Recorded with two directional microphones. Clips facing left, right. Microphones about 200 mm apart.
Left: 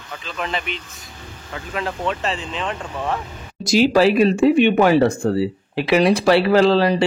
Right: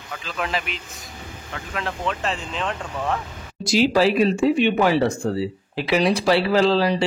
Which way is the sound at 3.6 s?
50° left (ahead or behind).